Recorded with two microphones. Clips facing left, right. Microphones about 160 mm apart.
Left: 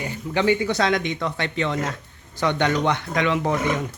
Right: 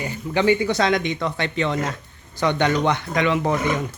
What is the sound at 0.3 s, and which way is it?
Speech, 15° right (ahead or behind).